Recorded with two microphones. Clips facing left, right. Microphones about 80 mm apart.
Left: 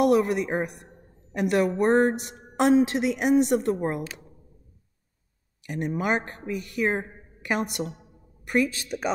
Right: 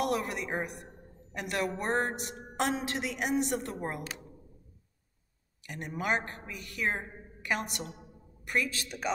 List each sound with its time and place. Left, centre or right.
0.0 s a woman's voice: left
5.6 s a woman's voice: left